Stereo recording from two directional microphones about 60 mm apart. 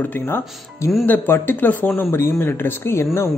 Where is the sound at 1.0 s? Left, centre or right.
Left.